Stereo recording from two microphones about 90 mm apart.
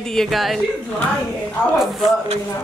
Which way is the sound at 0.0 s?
5° left (ahead or behind).